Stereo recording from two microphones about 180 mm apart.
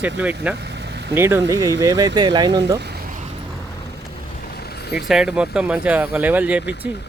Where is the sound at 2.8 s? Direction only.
65° right (ahead or behind).